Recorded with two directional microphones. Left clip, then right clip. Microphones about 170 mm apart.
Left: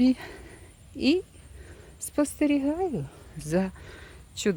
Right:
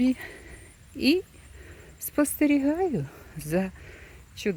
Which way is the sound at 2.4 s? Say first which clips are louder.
Right 3 dB; 20° right (ahead or behind).